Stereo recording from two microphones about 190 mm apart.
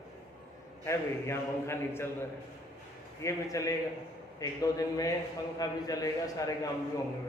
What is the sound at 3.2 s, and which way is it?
A man's voice, 15° left (ahead or behind).